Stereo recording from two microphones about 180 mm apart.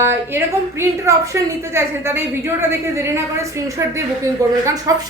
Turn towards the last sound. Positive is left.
turn(degrees=-20)  # may be behind; listen again after turning